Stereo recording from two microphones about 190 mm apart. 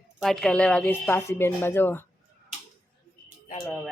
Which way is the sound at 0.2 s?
Centre (ahead or behind).